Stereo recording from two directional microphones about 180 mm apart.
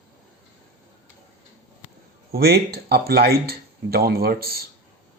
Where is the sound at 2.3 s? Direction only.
60° right (ahead or behind).